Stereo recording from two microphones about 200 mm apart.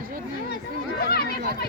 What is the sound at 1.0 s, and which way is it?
Speech, 50° left (ahead or behind).